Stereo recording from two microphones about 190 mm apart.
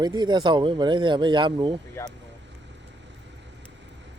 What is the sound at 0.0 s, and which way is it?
Speech, 20° right (ahead or behind).